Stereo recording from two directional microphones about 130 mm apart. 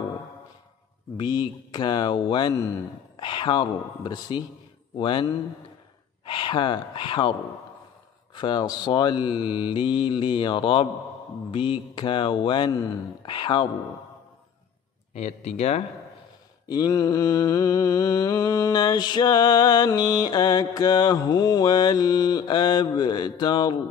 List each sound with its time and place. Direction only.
1.1 s mantra: 35° left (ahead or behind)
4.9 s speech: 40° left (ahead or behind)
6.2 s speech: 40° left (ahead or behind)
8.4 s mantra: 35° left (ahead or behind)
15.1 s speech: 55° left (ahead or behind)
16.6 s mantra: 30° left (ahead or behind)